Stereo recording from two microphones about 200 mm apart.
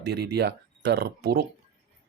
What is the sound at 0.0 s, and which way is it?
Speech, 55° right (ahead or behind).